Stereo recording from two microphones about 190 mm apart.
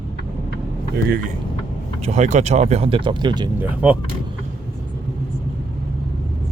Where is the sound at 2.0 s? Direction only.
35° right (ahead or behind).